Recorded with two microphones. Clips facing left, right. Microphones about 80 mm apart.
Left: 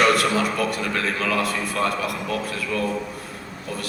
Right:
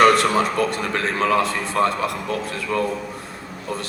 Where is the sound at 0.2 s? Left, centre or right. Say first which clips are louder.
Right 3 dB; right.